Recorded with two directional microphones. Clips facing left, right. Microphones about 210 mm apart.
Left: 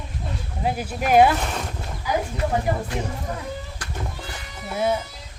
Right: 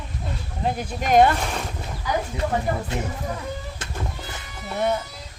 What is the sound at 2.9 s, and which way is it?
Speech, 25° right (ahead or behind).